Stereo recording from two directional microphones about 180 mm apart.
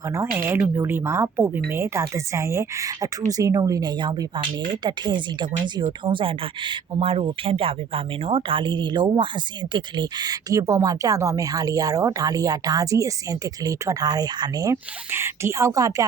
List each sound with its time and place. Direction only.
0.3 s speech: 10° right (ahead or behind)